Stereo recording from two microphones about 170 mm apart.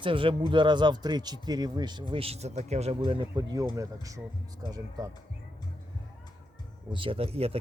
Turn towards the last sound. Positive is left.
turn(degrees=-35)  # may be behind; listen again after turning